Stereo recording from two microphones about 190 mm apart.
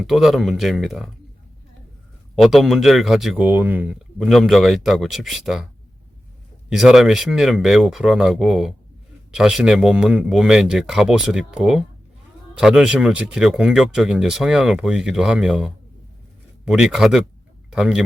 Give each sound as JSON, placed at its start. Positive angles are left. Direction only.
{"t": 0.0, "sound": "speech", "side_deg": 0}
{"t": 2.4, "sound": "speech", "side_deg": 0}
{"t": 6.7, "sound": "speech", "side_deg": 0}